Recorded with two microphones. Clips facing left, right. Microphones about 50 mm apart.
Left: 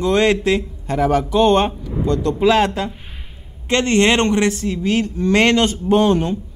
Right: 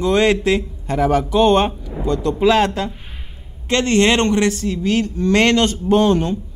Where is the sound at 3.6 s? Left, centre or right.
Left.